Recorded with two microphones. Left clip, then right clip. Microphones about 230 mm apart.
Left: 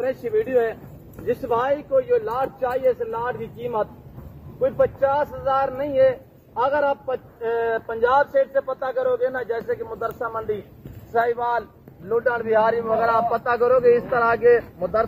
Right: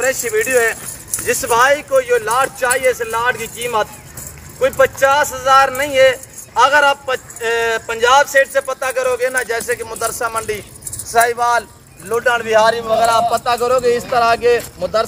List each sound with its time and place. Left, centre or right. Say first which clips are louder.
0.0 s speech: right 6 dB; centre
4.6 s speech: right 7 dB; right
7.4 s speech: right 6 dB; right
11.1 s a man's voice: right 8 dB; centre
13.5 s a man's voice: right 2 dB; centre